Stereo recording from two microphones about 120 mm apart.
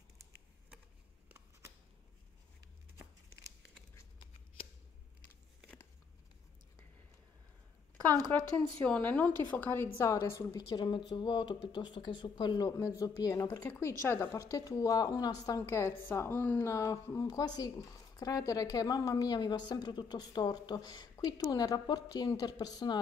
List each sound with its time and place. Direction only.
8.8 s a woman's voice: 10° left (ahead or behind); by 10.6 s 25° left (ahead or behind)
10.7 s a woman's voice: 40° left (ahead or behind)